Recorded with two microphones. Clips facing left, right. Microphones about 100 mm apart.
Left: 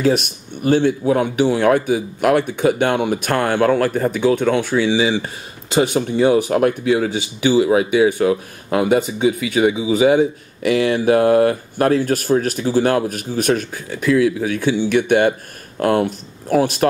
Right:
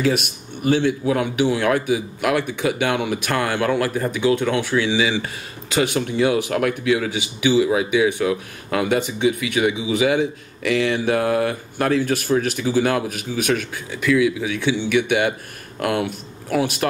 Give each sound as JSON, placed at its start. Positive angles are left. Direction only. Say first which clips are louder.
{"t": 0.0, "sound": "speech", "louder": "left 3 dB", "side_deg": 40}
{"t": 4.7, "sound": "speech", "louder": "left 3 dB", "side_deg": 30}
{"t": 7.5, "sound": "speech", "louder": "left 4 dB", "side_deg": 45}